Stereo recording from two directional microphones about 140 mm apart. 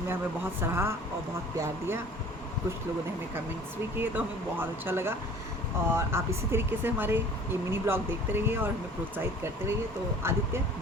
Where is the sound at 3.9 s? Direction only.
15° right (ahead or behind).